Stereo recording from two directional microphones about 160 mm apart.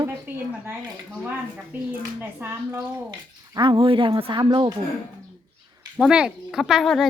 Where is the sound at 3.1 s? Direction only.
30° right (ahead or behind).